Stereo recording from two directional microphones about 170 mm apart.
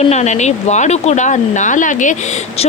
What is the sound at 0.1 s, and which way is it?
Speech, 40° left (ahead or behind).